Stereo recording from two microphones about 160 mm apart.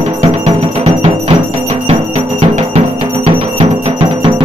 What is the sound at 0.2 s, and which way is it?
Music, 45° right (ahead or behind).